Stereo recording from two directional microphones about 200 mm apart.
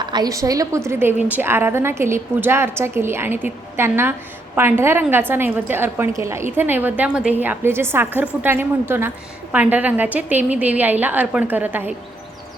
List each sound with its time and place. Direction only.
0.0 s a woman's voice: 20° right (ahead or behind)